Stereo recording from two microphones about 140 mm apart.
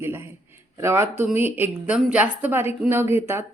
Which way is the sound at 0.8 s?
20° right (ahead or behind).